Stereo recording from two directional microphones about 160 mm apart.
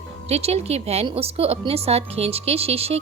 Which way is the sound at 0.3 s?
40° right (ahead or behind).